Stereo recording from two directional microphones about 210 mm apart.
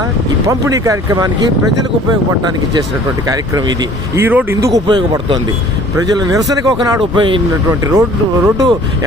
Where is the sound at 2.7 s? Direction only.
15° right (ahead or behind).